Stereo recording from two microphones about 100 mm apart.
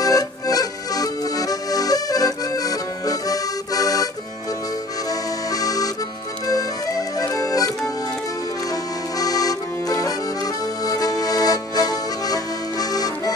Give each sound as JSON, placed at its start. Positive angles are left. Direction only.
{"t": 0.0, "sound": "accordion", "side_deg": 40}
{"t": 5.5, "sound": "accordion", "side_deg": 40}
{"t": 9.2, "sound": "accordion", "side_deg": 40}